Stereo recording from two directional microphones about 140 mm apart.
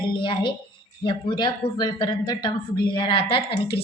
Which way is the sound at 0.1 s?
35° left (ahead or behind).